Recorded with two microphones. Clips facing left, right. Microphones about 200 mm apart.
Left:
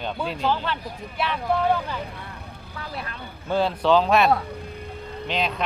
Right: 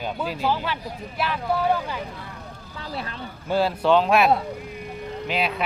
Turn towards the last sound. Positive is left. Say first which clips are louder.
# right 1 dB
turn(degrees=-5)  # may be behind; listen again after turning